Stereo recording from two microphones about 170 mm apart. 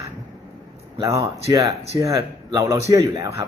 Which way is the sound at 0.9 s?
20° right (ahead or behind).